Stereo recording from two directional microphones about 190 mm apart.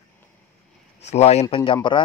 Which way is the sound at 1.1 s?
35° left (ahead or behind).